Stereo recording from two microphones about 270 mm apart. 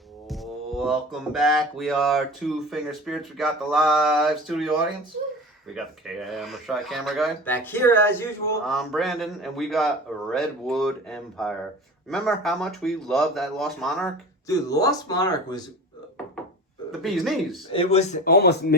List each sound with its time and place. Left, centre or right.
0.3 s music: centre
2.6 s speech: centre
14.4 s speech: centre
16.9 s speech: centre
17.7 s speech: left
18.3 s speech: left